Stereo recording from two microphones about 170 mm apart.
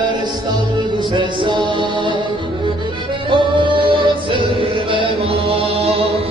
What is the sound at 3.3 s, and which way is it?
Music, 30° right (ahead or behind).